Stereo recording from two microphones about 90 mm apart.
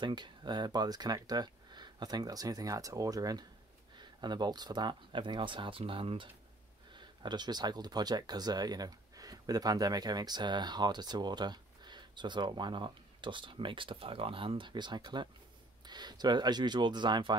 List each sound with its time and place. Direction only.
0.0 s speech: 55° right (ahead or behind)
3.9 s speech: 55° right (ahead or behind); by 6.2 s 85° right
6.9 s speech: 55° right (ahead or behind)